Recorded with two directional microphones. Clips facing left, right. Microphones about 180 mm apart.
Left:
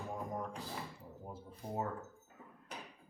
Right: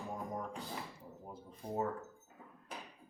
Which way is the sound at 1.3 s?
Centre (ahead or behind).